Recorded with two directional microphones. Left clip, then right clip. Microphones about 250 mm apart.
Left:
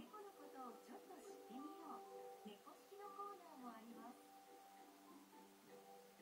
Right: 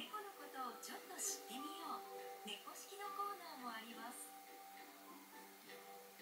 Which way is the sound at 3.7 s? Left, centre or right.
Centre.